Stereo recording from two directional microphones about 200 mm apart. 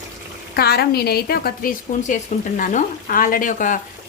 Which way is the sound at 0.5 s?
50° left (ahead or behind).